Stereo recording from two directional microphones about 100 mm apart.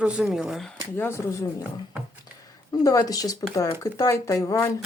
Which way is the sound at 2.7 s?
35° left (ahead or behind).